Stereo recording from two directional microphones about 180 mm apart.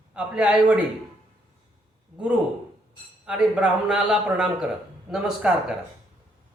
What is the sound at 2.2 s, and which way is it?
Speech, 5° right (ahead or behind).